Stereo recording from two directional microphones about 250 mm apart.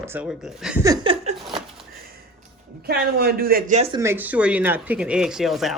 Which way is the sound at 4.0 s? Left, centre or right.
Centre.